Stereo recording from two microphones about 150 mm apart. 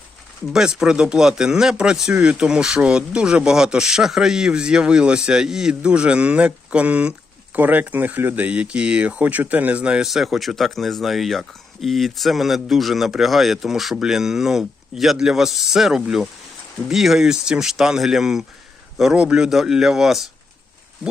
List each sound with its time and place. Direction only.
0.5 s speech: 5° right (ahead or behind)